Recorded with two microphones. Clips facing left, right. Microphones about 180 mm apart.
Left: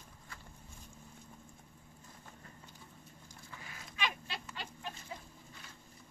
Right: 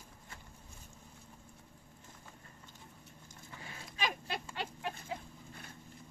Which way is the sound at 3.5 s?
30° right (ahead or behind).